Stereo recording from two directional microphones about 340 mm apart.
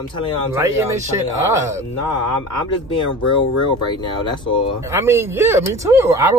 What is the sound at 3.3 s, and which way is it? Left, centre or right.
Speech, centre.